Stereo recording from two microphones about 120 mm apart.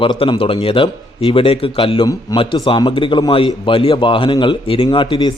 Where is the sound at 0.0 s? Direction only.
45° left (ahead or behind).